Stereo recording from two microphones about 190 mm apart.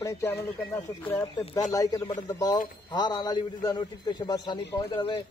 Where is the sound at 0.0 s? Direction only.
10° left (ahead or behind).